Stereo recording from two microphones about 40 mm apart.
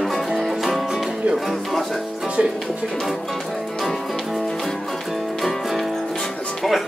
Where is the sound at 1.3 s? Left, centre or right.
Right.